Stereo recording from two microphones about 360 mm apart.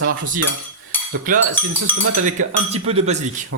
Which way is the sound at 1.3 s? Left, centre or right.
Right.